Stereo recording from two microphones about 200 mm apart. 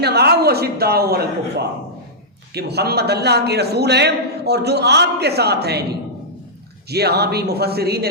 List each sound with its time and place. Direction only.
0.0 s a man's voice: 55° right (ahead or behind)
2.6 s a man's voice: 55° right (ahead or behind)
6.9 s speech: 55° right (ahead or behind)